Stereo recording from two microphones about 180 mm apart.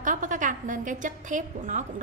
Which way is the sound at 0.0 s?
45° right (ahead or behind).